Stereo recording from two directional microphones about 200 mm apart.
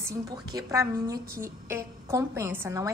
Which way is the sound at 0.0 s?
15° right (ahead or behind).